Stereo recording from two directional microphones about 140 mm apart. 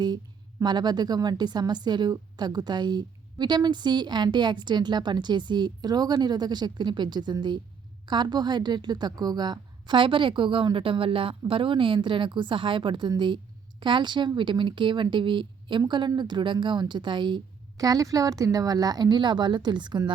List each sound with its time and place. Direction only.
0.6 s a woman's voice: 30° right (ahead or behind)